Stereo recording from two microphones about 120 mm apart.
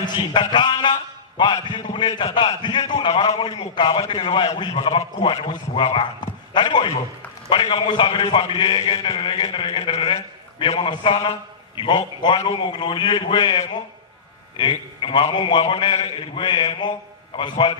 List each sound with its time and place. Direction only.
0.0 s a man's voice: 40° left (ahead or behind)